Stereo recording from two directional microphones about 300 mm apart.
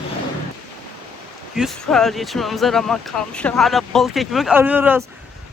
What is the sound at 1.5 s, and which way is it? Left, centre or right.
Speech, centre.